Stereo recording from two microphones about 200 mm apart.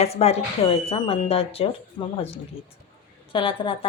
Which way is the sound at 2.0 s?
15° left (ahead or behind).